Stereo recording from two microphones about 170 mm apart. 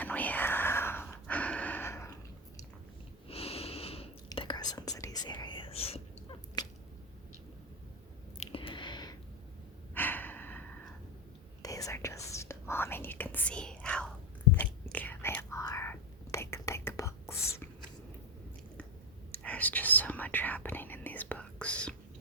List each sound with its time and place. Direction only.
0.0 s whispering: 10° left (ahead or behind)
3.2 s wheeze: 35° left (ahead or behind)
4.4 s whispering: 25° left (ahead or behind)
6.6 s whip: 25° left (ahead or behind)
8.4 s a sound: 30° left (ahead or behind)
9.9 s breathing: 10° left (ahead or behind)
11.6 s whispering: 20° left (ahead or behind)
19.3 s whispering: 10° left (ahead or behind)